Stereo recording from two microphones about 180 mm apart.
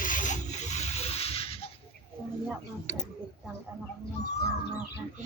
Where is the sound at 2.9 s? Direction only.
45° left (ahead or behind).